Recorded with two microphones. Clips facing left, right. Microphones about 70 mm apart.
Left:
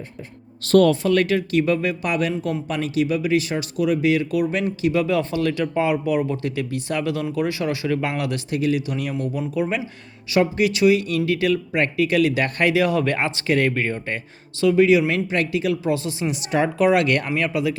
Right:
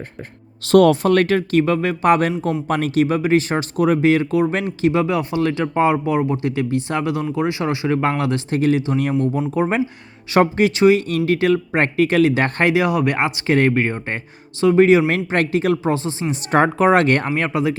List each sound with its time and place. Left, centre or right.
1.1 s speech: right
15.0 s speech: right